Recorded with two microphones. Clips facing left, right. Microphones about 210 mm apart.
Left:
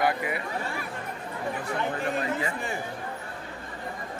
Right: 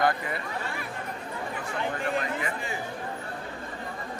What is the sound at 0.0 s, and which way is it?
Speech, 10° left (ahead or behind).